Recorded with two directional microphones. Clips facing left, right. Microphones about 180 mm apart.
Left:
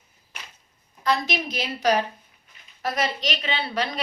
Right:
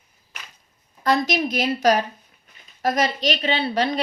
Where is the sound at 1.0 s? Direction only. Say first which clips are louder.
Right 4 dB; 45° right (ahead or behind).